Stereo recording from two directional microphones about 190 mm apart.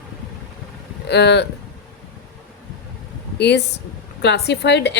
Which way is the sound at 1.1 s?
60° left (ahead or behind).